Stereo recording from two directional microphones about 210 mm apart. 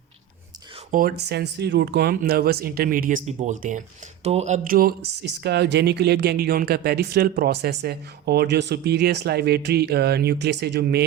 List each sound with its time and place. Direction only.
0.9 s speech: 40° right (ahead or behind)